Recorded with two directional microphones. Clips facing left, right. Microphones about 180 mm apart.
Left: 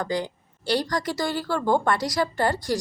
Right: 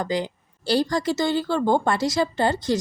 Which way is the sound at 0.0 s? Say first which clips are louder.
Right 2 dB; 20° right (ahead or behind).